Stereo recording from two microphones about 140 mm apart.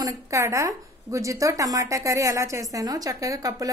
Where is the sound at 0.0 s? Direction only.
20° right (ahead or behind).